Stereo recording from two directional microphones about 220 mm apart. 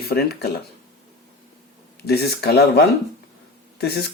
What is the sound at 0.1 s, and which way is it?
Speech, 45° left (ahead or behind).